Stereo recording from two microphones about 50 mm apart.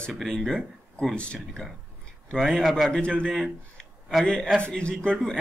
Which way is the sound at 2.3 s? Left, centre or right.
Centre.